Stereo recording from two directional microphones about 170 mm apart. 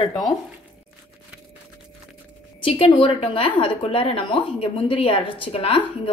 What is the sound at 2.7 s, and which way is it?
A woman's voice, 35° left (ahead or behind).